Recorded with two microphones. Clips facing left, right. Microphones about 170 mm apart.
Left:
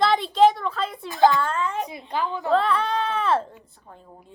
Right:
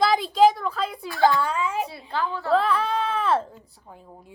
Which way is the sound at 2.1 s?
15° left (ahead or behind).